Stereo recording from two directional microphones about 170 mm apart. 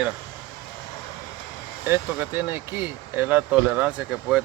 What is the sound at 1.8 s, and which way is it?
Speech, 15° right (ahead or behind).